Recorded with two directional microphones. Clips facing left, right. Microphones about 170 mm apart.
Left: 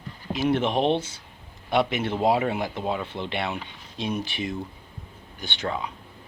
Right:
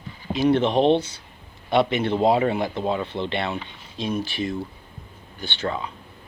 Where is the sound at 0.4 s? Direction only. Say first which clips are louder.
Right 4 dB; 5° left (ahead or behind).